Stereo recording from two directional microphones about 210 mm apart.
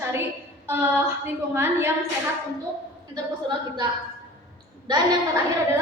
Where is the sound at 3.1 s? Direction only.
20° right (ahead or behind).